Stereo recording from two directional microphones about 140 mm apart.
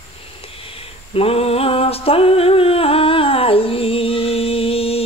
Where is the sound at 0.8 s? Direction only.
45° left (ahead or behind).